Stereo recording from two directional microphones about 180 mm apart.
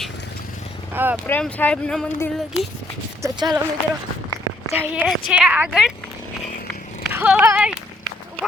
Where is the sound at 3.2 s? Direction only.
20° right (ahead or behind).